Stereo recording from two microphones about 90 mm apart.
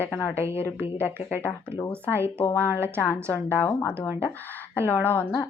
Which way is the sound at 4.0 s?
20° left (ahead or behind).